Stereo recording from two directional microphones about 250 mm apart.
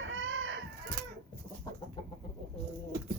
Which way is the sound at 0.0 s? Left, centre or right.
Right.